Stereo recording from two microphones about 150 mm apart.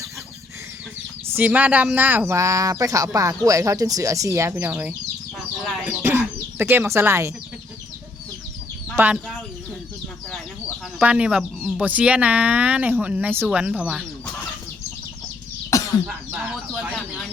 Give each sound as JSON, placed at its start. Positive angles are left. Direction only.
{"t": 1.3, "sound": "speech", "side_deg": -10}
{"t": 5.6, "sound": "speech", "side_deg": 0}
{"t": 6.0, "sound": "cough", "side_deg": -15}
{"t": 9.0, "sound": "speech", "side_deg": -15}
{"t": 11.0, "sound": "speech", "side_deg": -5}
{"t": 15.7, "sound": "cough", "side_deg": 20}
{"t": 16.0, "sound": "chicken", "side_deg": -5}